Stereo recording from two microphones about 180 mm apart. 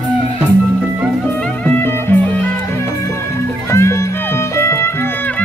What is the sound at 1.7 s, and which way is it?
Music, 10° left (ahead or behind).